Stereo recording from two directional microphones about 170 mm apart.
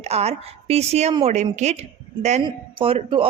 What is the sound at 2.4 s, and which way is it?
Speech, 30° right (ahead or behind).